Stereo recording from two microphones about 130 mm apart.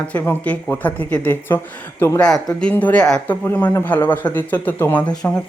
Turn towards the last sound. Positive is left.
turn(degrees=15)  # may be behind; listen again after turning